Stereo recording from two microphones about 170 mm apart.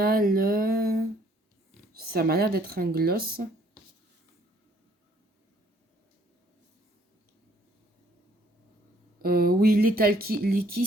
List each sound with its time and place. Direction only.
0.0 s a sound: 60° right (ahead or behind)
1.9 s speech: 60° right (ahead or behind)
9.2 s speech: 60° right (ahead or behind)